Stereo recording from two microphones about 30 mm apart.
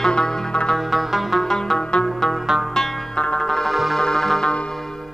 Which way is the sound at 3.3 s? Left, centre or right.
Centre.